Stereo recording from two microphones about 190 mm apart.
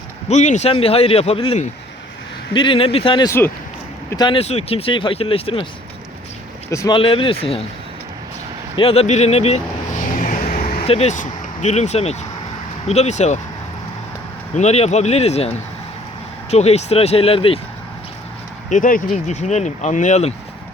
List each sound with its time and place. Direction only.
0.3 s speech: 40° left (ahead or behind)
6.7 s speech: 20° left (ahead or behind)
8.7 s vehicle: 30° left (ahead or behind); by 10.8 s 45° left (ahead or behind)
10.8 s speech: 35° left (ahead or behind)
14.5 s speech: 35° left (ahead or behind)
18.7 s speech: 45° left (ahead or behind)